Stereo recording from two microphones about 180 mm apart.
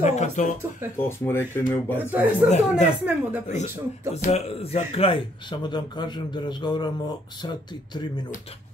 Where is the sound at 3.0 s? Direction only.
10° right (ahead or behind).